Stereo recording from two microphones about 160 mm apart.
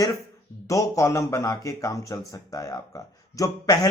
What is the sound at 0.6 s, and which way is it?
Speech, 20° left (ahead or behind).